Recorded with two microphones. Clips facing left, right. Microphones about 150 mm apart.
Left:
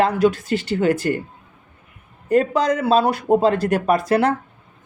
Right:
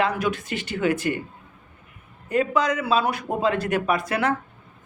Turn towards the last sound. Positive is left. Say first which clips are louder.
# left 6 dB
turn(degrees=35)  # may be behind; listen again after turning